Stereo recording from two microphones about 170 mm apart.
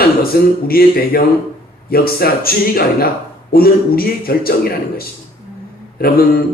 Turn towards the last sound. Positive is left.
turn(degrees=60)  # may be behind; listen again after turning